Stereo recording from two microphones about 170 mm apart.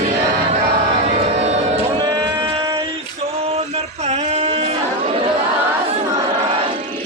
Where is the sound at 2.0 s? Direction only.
25° right (ahead or behind).